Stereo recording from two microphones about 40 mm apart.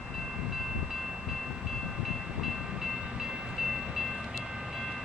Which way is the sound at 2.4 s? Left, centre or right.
Centre.